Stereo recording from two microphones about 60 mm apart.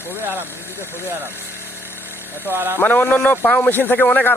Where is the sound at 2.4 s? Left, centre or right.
Right.